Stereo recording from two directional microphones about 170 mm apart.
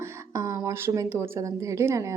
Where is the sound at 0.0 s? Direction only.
15° right (ahead or behind).